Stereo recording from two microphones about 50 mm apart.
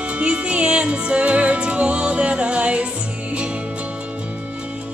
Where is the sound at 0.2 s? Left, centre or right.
Right.